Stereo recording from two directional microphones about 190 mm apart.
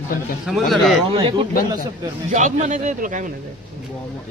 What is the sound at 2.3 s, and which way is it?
A man's voice, 40° right (ahead or behind).